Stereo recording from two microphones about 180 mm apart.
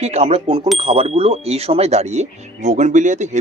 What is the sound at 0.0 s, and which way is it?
Speech, 35° right (ahead or behind).